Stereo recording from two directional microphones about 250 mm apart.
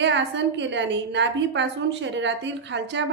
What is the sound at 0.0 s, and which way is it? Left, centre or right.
A woman's voice, right.